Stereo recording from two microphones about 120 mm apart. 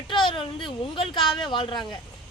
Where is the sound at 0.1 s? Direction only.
45° left (ahead or behind).